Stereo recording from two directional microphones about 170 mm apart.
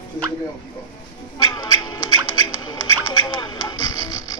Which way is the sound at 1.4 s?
25° left (ahead or behind).